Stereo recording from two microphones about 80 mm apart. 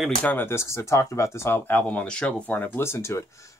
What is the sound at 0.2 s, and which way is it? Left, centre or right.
Speech, left.